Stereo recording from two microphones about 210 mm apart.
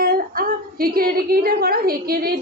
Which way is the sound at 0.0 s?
45° right (ahead or behind).